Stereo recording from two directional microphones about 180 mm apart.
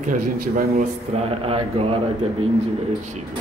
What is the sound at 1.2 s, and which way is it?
Speech, 35° right (ahead or behind).